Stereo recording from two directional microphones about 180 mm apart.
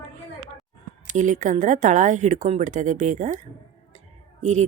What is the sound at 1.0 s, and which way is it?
A woman's voice, 45° right (ahead or behind).